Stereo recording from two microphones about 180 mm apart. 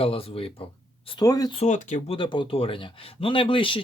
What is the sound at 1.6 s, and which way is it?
Speech, 40° left (ahead or behind).